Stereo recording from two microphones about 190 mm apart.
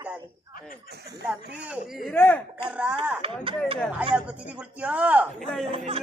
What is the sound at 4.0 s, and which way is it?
Speech, 5° right (ahead or behind).